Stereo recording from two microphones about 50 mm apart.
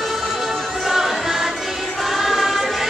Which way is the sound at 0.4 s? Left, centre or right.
Centre.